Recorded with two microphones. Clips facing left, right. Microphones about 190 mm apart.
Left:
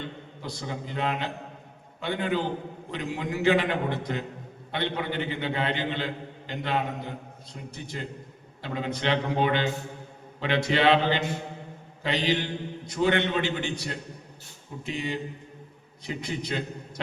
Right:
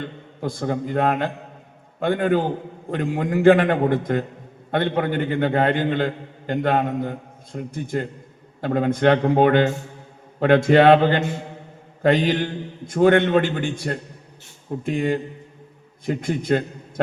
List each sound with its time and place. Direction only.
0.0 s a man's voice: 50° right (ahead or behind)